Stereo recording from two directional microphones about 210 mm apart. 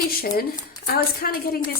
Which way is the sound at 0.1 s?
45° left (ahead or behind).